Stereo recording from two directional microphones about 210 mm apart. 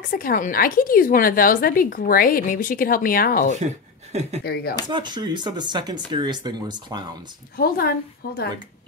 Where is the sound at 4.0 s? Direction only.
30° right (ahead or behind).